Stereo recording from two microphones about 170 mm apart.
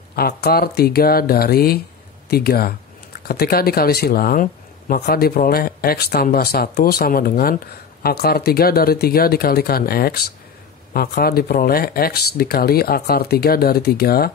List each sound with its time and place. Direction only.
0.1 s speech: 65° left (ahead or behind)